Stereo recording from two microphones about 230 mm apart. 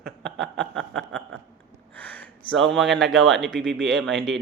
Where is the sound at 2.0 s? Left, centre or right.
Centre.